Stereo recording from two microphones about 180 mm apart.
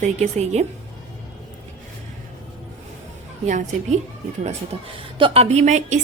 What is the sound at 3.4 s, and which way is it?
A woman's voice, 40° right (ahead or behind).